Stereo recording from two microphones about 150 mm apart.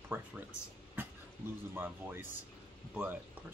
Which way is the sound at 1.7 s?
15° right (ahead or behind).